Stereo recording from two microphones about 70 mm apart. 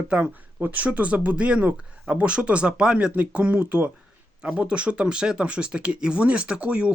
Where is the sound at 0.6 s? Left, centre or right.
Right.